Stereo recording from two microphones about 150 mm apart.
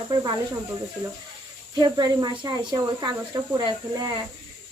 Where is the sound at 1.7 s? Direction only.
30° right (ahead or behind).